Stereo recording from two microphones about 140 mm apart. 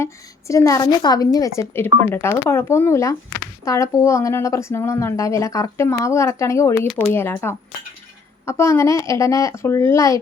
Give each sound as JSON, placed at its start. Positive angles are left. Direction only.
{"t": 0.0, "sound": "speech", "side_deg": 20}